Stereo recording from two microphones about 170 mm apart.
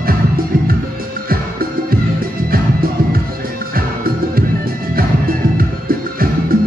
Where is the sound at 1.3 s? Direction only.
60° right (ahead or behind).